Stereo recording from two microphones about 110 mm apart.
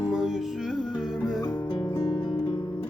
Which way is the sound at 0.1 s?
5° right (ahead or behind).